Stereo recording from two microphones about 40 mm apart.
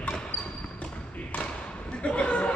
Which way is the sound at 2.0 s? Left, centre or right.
Left.